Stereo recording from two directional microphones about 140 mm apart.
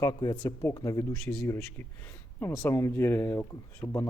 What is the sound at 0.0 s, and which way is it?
A man's voice, 30° left (ahead or behind).